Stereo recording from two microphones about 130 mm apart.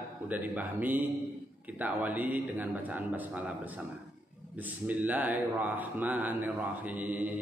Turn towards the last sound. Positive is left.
turn(degrees=-10)  # may be behind; listen again after turning